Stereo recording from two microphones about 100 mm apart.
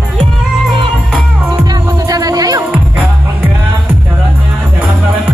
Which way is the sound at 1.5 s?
40° right (ahead or behind).